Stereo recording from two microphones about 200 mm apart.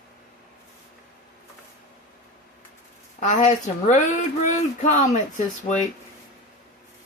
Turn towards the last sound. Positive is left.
turn(degrees=40)  # may be behind; listen again after turning